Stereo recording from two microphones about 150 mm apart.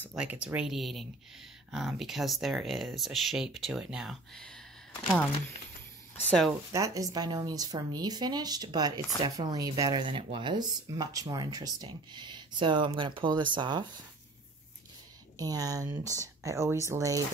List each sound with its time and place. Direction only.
0.1 s speech: 5° right (ahead or behind)
6.7 s speech: 20° right (ahead or behind)
15.3 s speech: 25° right (ahead or behind)